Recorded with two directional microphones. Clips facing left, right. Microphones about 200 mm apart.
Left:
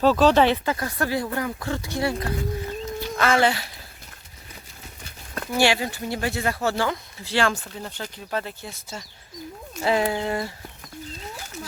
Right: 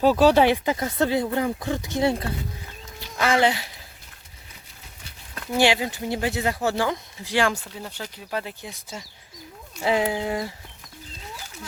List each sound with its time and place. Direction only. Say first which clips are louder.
0.0 s speech: right 1 dB; 10° right (ahead or behind)
5.5 s speech: right 1 dB; 20° right (ahead or behind)